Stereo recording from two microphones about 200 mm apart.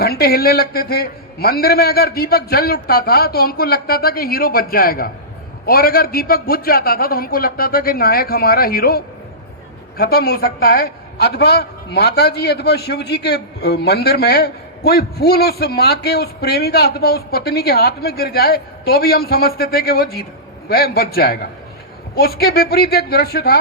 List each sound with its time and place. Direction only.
0.0 s a man's voice: 50° left (ahead or behind)